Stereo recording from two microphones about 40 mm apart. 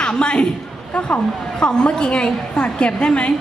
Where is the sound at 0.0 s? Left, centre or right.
Left.